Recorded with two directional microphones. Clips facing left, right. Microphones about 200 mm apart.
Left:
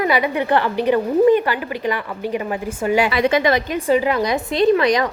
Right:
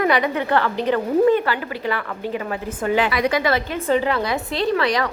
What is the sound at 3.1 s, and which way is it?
A woman's voice, 25° left (ahead or behind).